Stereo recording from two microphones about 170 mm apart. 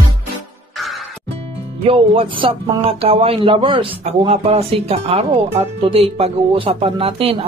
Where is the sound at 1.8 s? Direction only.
30° right (ahead or behind).